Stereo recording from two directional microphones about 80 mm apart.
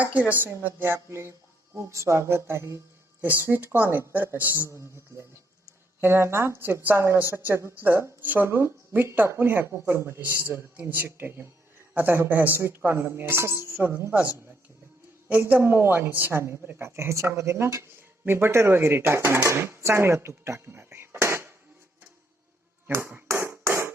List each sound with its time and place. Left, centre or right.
0.0 s speech: centre; by 2.8 s right
3.2 s speech: right
4.7 s speech: right
22.9 s a sound: right